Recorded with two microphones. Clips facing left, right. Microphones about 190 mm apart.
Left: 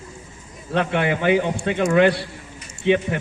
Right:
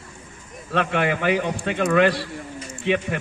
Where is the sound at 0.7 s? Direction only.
25° left (ahead or behind).